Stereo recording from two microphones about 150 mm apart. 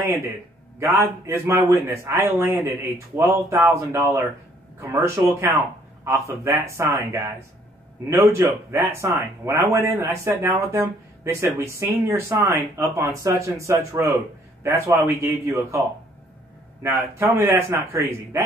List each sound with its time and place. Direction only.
0.9 s speech: 20° right (ahead or behind)
16.8 s speech: 20° right (ahead or behind)